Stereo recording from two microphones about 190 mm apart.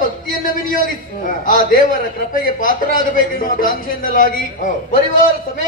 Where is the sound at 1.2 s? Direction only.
45° left (ahead or behind).